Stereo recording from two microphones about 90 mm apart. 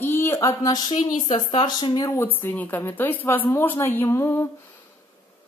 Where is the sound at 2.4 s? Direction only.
20° left (ahead or behind).